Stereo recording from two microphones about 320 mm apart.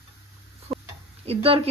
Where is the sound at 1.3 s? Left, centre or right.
Centre.